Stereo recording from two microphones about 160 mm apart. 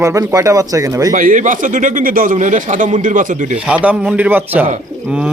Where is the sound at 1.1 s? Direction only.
60° right (ahead or behind).